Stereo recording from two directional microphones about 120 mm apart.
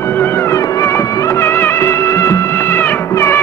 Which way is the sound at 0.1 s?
20° left (ahead or behind).